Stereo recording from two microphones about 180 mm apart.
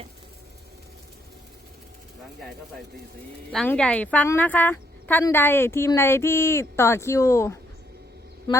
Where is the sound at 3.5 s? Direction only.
5° left (ahead or behind).